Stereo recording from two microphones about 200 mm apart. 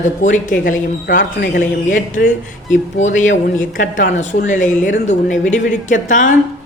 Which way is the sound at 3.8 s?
40° left (ahead or behind).